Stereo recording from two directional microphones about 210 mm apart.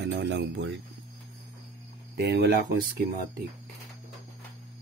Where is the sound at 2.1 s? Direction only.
50° right (ahead or behind).